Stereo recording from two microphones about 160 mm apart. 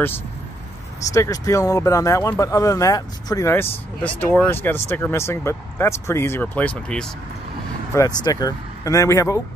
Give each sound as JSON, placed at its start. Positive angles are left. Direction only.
{"t": 1.1, "sound": "speech", "side_deg": 20}
{"t": 7.9, "sound": "speech", "side_deg": 20}